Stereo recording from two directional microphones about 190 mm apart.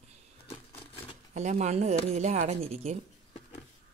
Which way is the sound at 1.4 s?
40° right (ahead or behind).